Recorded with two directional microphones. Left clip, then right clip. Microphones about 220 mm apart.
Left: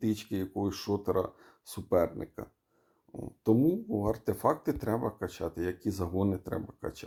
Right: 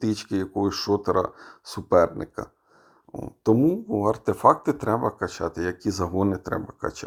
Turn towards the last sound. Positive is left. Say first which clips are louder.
# right 8 dB
turn(degrees=-20)  # may be behind; listen again after turning